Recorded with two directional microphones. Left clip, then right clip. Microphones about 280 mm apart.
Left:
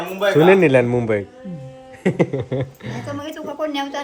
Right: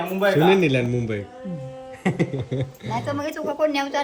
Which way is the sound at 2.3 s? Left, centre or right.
Centre.